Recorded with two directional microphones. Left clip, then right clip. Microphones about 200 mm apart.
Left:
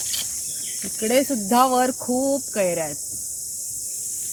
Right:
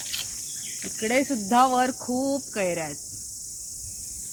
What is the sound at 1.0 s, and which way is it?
Speech, 55° left (ahead or behind).